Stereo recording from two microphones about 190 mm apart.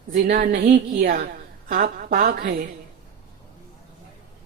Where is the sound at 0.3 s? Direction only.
50° right (ahead or behind).